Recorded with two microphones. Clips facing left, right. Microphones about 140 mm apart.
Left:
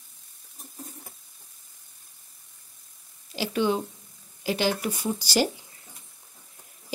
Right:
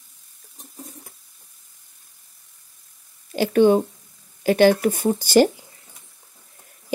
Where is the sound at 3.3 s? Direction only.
50° right (ahead or behind).